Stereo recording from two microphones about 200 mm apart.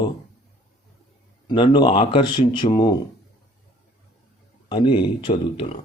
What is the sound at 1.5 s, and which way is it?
Speech, 20° left (ahead or behind).